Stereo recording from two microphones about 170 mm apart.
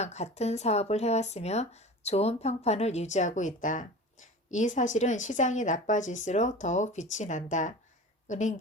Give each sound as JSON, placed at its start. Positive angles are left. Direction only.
{"t": 0.0, "sound": "speech", "side_deg": 40}